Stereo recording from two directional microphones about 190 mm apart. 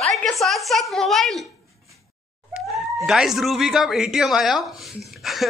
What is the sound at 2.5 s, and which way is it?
Speech, 5° right (ahead or behind).